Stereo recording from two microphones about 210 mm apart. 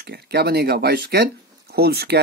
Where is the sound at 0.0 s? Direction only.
50° right (ahead or behind).